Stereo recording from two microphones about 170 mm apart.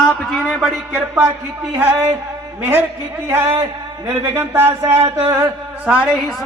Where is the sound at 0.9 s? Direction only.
10° right (ahead or behind).